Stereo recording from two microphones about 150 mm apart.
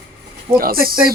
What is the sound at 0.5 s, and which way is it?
Speech, 80° right.